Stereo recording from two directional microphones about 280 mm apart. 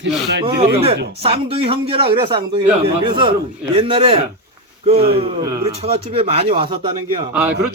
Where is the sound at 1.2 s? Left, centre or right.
Centre.